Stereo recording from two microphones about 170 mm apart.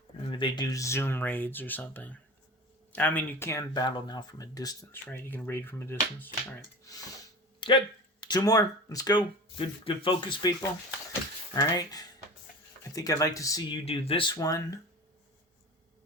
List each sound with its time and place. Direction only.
0.3 s speech: 30° left (ahead or behind)
5.0 s speech: 10° left (ahead or behind)
7.6 s a sound: 30° left (ahead or behind)
8.3 s speech: 20° left (ahead or behind)
13.8 s speech: 35° left (ahead or behind)